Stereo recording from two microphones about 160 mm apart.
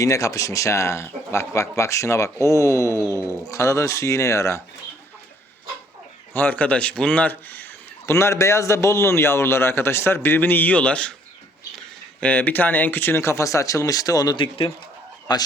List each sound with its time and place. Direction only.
0.0 s speech: 20° left (ahead or behind)
3.1 s speech: 15° right (ahead or behind)
3.5 s speech: 20° left (ahead or behind)
6.3 s a man's voice: 10° left (ahead or behind)
12.2 s speech: 10° left (ahead or behind); by 15.4 s 25° left (ahead or behind)